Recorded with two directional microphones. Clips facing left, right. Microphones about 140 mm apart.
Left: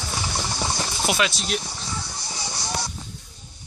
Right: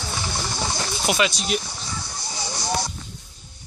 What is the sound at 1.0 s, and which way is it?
Speech, centre (ahead or behind).